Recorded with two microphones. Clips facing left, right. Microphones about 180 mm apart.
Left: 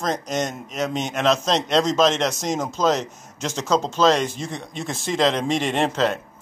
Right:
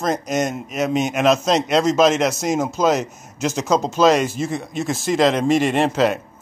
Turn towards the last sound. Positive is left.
turn(degrees=-5)  # may be behind; listen again after turning